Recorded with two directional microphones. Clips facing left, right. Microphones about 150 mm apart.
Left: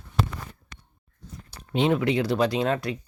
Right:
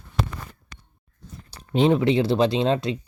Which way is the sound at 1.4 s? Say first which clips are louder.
Right 4 dB; 35° right (ahead or behind).